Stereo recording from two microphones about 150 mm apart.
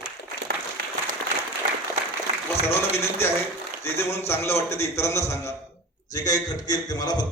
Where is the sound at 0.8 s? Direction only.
90° right.